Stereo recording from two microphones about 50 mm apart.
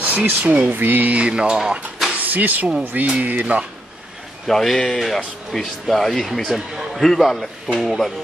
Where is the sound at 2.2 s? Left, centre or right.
Right.